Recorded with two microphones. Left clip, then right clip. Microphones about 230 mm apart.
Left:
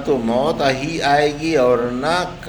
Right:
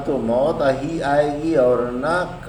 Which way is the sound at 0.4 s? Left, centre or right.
Left.